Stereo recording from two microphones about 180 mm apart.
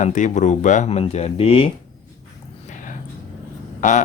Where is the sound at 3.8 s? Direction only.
45° left (ahead or behind).